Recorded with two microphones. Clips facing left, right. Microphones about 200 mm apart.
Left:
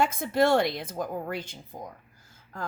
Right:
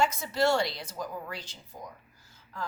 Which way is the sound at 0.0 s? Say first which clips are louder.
Left 3 dB; 55° left (ahead or behind).